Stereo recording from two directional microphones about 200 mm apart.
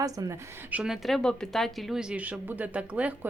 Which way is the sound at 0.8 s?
Centre (ahead or behind).